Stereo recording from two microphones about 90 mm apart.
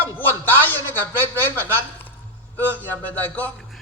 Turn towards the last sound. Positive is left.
turn(degrees=20)  # may be behind; listen again after turning